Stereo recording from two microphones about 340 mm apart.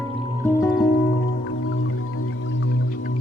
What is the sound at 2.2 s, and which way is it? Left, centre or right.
Music, left.